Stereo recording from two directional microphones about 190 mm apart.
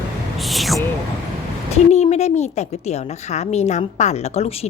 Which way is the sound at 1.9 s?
35° left (ahead or behind).